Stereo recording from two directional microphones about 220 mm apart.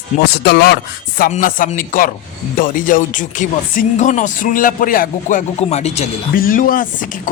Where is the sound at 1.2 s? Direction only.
40° left (ahead or behind).